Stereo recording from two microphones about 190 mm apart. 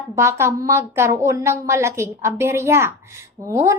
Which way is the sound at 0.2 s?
15° right (ahead or behind).